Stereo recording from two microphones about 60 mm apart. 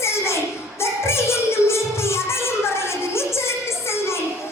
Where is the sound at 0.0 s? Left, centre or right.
Left.